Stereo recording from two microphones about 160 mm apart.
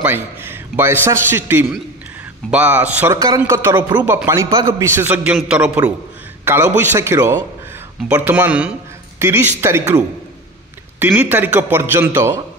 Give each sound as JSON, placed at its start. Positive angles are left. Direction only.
{"t": 0.0, "sound": "a man's voice", "side_deg": -15}
{"t": 3.2, "sound": "speech", "side_deg": -20}
{"t": 4.0, "sound": "a man's voice", "side_deg": -10}
{"t": 4.3, "sound": "a man's voice", "side_deg": -25}
{"t": 11.0, "sound": "a man's voice", "side_deg": -10}